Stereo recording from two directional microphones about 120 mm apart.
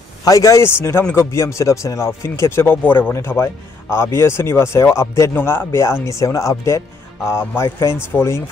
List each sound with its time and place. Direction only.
0.2 s speech: 25° left (ahead or behind)